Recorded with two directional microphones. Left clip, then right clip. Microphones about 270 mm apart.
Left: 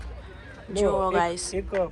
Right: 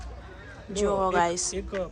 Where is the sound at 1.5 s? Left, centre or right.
Left.